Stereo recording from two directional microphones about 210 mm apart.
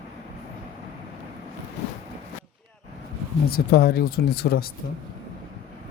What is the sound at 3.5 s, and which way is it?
Speech, 45° left (ahead or behind).